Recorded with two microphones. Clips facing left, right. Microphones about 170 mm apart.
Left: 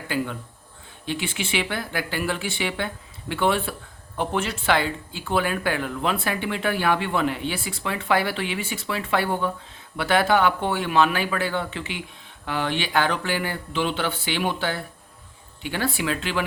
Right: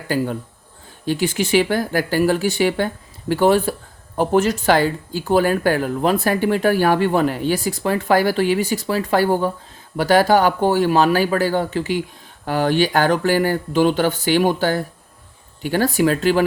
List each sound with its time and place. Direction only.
0.1 s speech: 40° right (ahead or behind)